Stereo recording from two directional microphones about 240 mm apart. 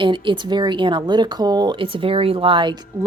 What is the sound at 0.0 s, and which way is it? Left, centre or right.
Speech, centre.